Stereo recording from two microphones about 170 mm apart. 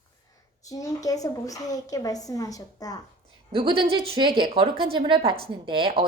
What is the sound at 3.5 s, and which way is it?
A woman's voice, 30° right (ahead or behind).